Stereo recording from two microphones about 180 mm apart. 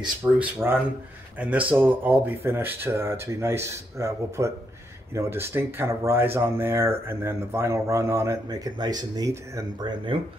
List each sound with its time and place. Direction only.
0.4 s speech: 10° right (ahead or behind)